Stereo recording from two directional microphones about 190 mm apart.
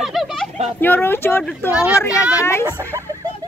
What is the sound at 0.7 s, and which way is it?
Speech, 10° left (ahead or behind).